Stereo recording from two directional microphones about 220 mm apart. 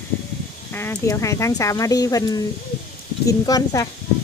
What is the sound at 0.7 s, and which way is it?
Speech, 10° left (ahead or behind).